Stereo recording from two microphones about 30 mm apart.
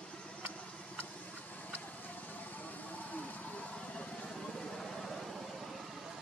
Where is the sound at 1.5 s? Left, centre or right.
Left.